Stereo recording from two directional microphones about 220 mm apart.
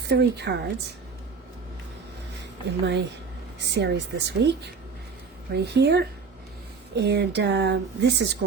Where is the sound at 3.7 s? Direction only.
50° right (ahead or behind).